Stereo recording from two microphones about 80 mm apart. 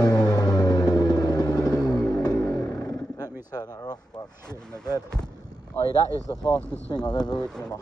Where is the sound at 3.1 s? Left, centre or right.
Left.